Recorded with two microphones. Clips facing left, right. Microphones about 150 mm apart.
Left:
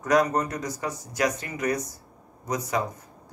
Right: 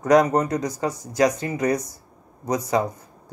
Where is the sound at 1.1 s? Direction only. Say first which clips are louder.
Right 7 dB; 30° right (ahead or behind).